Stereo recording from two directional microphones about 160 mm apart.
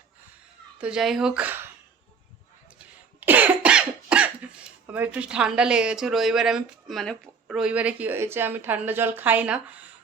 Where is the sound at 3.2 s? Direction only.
10° right (ahead or behind).